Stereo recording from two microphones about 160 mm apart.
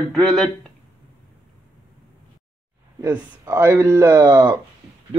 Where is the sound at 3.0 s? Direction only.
15° right (ahead or behind).